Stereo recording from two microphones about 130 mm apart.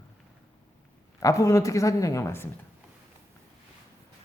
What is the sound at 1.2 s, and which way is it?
Speech, 25° left (ahead or behind).